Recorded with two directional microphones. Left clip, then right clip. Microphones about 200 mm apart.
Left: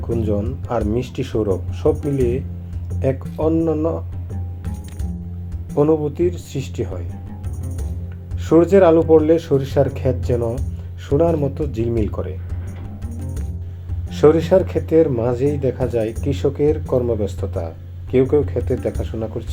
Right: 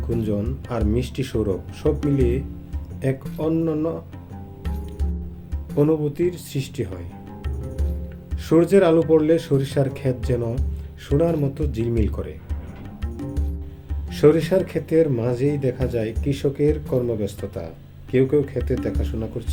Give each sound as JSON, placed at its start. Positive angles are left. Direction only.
{"t": 0.1, "sound": "speech", "side_deg": -5}
{"t": 5.7, "sound": "speech", "side_deg": -5}
{"t": 7.6, "sound": "music", "side_deg": 0}
{"t": 8.4, "sound": "speech", "side_deg": -5}
{"t": 13.1, "sound": "music", "side_deg": 0}
{"t": 14.1, "sound": "speech", "side_deg": 0}